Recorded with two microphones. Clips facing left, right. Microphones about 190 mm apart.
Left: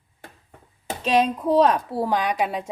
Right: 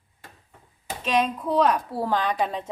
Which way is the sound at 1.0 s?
35° left (ahead or behind).